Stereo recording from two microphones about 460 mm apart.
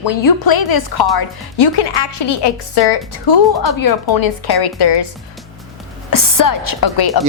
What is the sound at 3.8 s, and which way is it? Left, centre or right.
A woman's voice, left.